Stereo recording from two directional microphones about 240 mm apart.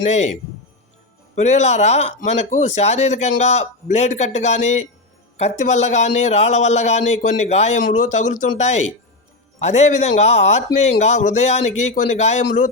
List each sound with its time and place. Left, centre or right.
0.0 s a man's voice: left
1.4 s a man's voice: left